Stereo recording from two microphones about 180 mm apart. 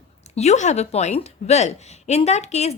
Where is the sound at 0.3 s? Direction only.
40° left (ahead or behind).